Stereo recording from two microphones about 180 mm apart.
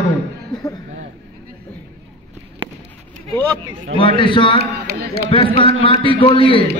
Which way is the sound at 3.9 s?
30° left (ahead or behind).